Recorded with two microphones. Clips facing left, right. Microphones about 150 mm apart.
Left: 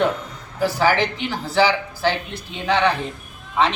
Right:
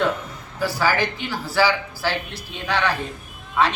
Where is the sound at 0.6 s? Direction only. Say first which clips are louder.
Left 3 dB; 20° left (ahead or behind).